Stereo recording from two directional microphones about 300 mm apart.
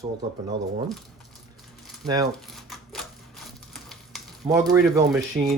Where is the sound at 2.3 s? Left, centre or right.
Centre.